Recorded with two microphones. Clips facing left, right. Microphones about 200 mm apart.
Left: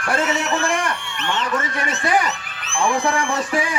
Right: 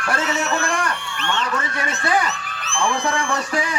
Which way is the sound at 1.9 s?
15° left (ahead or behind).